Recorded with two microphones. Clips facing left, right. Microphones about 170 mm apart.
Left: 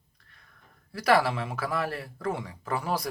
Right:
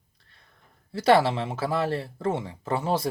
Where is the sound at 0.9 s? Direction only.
25° right (ahead or behind).